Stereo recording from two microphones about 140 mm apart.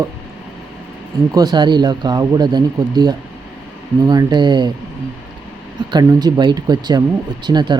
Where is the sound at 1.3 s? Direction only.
30° right (ahead or behind).